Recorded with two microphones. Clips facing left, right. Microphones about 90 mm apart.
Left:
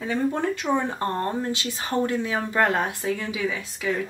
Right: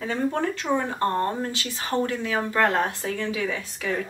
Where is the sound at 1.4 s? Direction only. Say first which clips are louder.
Left 2 dB; 20° left (ahead or behind).